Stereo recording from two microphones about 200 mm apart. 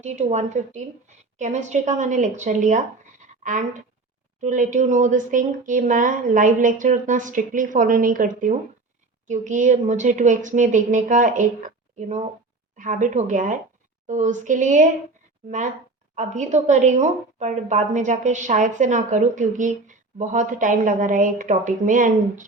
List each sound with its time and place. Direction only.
0.0 s a woman's voice: 35° right (ahead or behind)